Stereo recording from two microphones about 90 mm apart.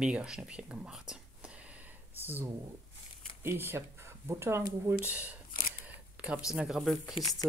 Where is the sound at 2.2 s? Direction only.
25° right (ahead or behind).